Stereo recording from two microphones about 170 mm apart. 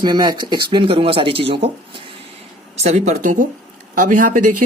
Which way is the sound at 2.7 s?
40° right (ahead or behind).